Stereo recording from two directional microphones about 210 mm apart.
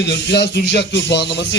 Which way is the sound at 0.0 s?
55° left (ahead or behind).